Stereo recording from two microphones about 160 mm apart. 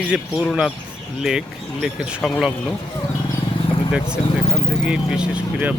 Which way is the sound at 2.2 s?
Centre (ahead or behind).